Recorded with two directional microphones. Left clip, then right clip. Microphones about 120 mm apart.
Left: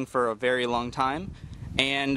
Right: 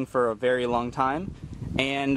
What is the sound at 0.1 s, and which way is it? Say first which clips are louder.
Speech: right 1 dB; 35° left (ahead or behind).